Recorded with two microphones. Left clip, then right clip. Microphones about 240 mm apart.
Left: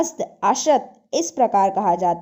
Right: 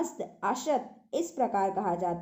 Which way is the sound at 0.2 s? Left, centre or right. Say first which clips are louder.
Left 12 dB; left.